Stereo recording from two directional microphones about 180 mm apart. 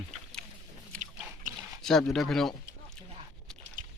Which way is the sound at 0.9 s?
5° left (ahead or behind).